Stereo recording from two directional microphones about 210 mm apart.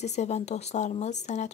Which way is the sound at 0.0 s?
35° left (ahead or behind).